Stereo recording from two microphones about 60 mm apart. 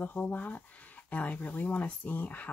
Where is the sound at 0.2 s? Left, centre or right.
Left.